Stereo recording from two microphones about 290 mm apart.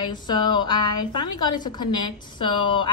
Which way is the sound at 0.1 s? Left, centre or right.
Centre.